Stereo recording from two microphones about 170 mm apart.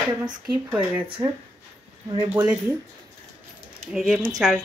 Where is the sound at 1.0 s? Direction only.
30° right (ahead or behind).